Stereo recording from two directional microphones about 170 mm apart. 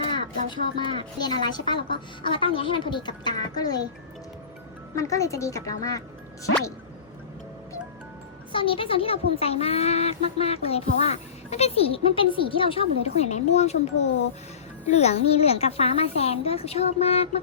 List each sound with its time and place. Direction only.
0.1 s a woman's voice: 25° left (ahead or behind)
4.9 s a woman's voice: 20° left (ahead or behind)
8.5 s a child's voice: 30° left (ahead or behind)